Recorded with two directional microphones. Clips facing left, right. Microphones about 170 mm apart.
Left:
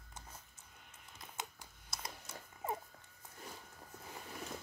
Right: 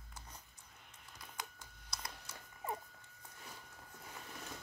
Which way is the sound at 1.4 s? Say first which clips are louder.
Left 2 dB; 20° left (ahead or behind).